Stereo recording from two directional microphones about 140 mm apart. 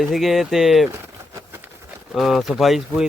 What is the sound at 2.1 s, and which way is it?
Speech, centre (ahead or behind).